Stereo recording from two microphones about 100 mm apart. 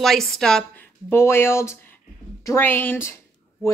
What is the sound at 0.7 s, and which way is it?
A woman's voice, 20° left (ahead or behind).